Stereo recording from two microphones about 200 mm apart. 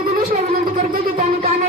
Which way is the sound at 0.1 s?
45° right (ahead or behind).